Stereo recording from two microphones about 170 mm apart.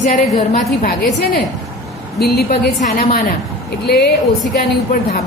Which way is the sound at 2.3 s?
65° left (ahead or behind).